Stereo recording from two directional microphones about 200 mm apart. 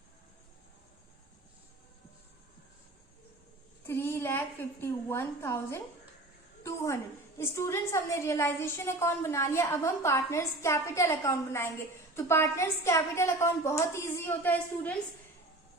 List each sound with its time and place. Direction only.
3.8 s a woman's voice: 10° left (ahead or behind)